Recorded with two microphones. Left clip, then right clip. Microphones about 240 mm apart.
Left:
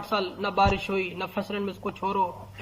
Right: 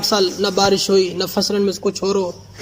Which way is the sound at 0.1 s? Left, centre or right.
Right.